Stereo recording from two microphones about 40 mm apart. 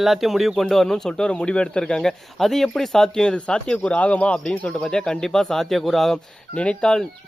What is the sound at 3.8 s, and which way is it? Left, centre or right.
Speech, left.